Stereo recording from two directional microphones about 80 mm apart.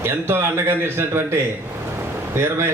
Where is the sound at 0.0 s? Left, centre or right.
Right.